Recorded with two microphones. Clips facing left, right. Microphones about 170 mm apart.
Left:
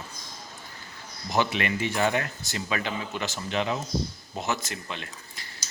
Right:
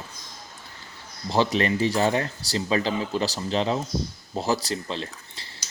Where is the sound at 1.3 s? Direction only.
30° right (ahead or behind).